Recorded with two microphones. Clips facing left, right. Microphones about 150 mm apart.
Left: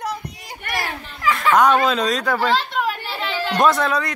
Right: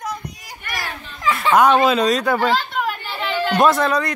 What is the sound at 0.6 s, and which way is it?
Children playing, 55° left (ahead or behind).